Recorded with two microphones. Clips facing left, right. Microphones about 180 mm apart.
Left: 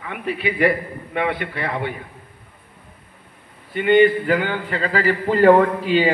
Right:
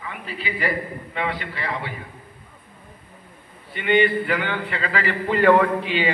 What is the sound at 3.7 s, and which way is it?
A man's voice, 45° left (ahead or behind).